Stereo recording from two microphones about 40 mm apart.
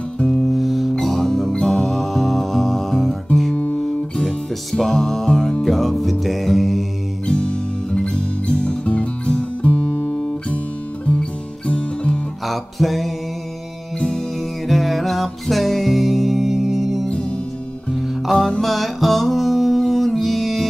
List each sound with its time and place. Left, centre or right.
0.3 s music: centre
3.5 s guitar: left
4.7 s music: centre
7.2 s music: left
9.8 s guitar: centre
11.1 s music: left
12.4 s music: centre
13.9 s music: centre
14.7 s music: centre
18.2 s music: centre